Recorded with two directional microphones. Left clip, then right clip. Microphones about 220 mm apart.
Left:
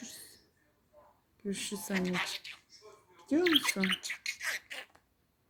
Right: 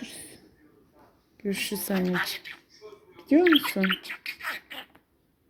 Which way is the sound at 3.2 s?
5° left (ahead or behind).